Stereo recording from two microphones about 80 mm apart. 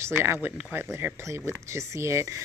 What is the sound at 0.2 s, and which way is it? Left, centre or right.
Speech, right.